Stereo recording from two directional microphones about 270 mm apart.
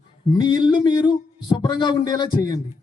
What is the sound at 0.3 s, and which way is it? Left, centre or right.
Speech, centre.